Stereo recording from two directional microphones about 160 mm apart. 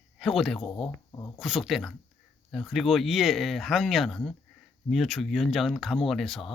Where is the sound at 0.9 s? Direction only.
20° left (ahead or behind).